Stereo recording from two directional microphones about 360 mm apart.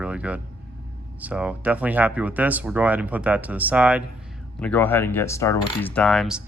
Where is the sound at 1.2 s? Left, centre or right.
Centre.